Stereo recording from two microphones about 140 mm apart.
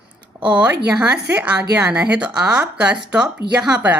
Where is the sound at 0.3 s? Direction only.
10° right (ahead or behind).